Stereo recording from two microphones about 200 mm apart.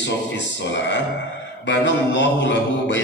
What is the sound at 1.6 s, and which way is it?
A man's voice, 60° left (ahead or behind).